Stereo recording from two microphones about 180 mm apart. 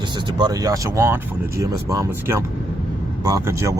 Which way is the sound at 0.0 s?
25° right (ahead or behind).